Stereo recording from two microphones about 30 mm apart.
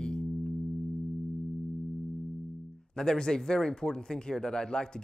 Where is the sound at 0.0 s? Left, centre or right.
Left.